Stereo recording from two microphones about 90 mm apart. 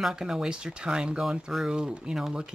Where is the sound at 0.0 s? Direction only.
5° right (ahead or behind).